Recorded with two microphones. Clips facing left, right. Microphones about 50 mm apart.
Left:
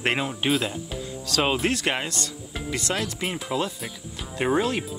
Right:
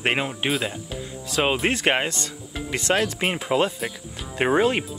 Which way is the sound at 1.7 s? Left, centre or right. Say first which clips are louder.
Right 4 dB; right.